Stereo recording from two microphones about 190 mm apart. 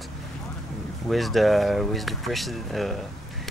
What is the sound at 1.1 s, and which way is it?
Speech, centre (ahead or behind).